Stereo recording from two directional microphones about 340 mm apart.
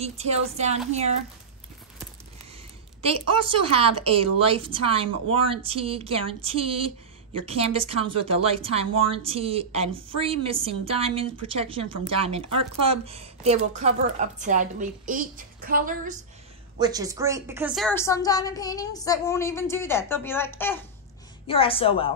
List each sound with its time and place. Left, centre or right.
0.0 s a woman's voice: centre
3.4 s a woman's voice: centre
16.7 s a woman's voice: centre